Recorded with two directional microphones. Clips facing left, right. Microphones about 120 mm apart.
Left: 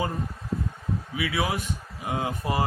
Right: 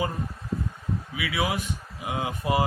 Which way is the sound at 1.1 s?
35° left (ahead or behind).